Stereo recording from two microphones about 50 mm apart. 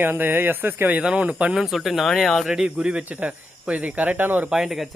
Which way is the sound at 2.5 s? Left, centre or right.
Centre.